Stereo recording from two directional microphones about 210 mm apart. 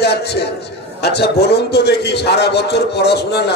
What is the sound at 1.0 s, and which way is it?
A man's voice, 50° left (ahead or behind).